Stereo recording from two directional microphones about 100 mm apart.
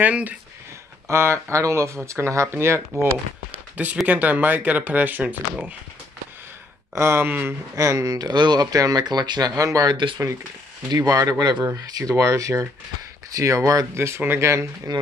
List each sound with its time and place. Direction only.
0.0 s speech: 15° right (ahead or behind)
1.0 s speech: 25° right (ahead or behind)
3.7 s speech: 15° right (ahead or behind)
7.0 s speech: 25° right (ahead or behind)
7.7 s speech: 30° right (ahead or behind)
14.9 s speech: 45° right (ahead or behind)